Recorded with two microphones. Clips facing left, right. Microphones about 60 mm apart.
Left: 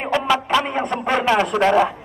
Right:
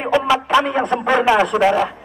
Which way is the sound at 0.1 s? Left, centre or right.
Centre.